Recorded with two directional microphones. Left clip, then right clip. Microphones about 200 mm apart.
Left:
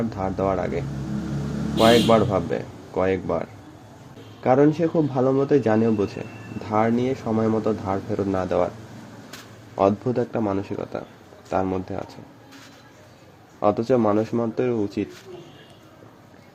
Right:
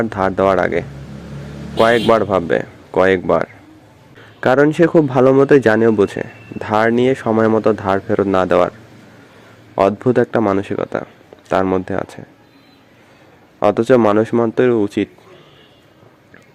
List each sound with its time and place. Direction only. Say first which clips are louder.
0.0 s speech: right 10 dB; 15° right (ahead or behind)
10.1 s speech: right 10 dB; 15° right (ahead or behind)
13.6 s speech: right 8 dB; 15° right (ahead or behind)